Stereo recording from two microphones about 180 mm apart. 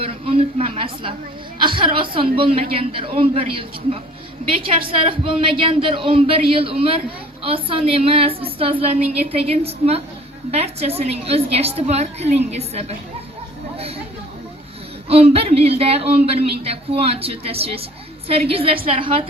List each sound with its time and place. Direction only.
0.0 s a woman's voice: 30° right (ahead or behind)
15.1 s a woman's voice: 35° right (ahead or behind)